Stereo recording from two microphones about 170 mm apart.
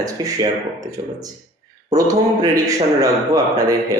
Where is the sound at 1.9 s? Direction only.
20° right (ahead or behind).